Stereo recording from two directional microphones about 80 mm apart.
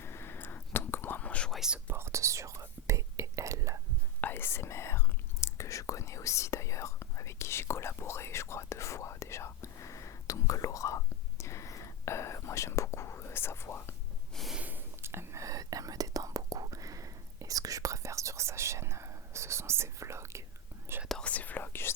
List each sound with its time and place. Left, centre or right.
0.0 s whispering: left
1.5 s whispering: centre
1.9 s whispering: right
4.2 s whispering: left
14.6 s whispering: right
21.1 s whispering: centre